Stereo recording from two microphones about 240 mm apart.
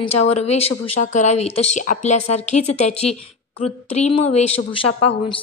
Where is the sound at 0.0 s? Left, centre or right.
Left.